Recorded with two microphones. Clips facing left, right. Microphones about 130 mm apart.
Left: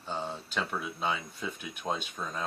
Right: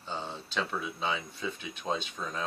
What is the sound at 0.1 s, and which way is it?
Speech, 5° left (ahead or behind).